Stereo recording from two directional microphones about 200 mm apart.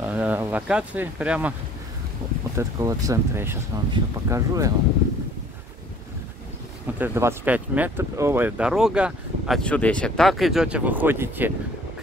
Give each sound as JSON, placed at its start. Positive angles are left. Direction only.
{"t": 0.0, "sound": "speech", "side_deg": -10}
{"t": 2.5, "sound": "speech", "side_deg": -15}
{"t": 7.0, "sound": "speech", "side_deg": -10}